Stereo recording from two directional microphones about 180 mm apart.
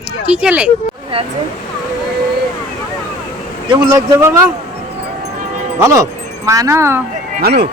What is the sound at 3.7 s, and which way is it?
Speech, 20° right (ahead or behind).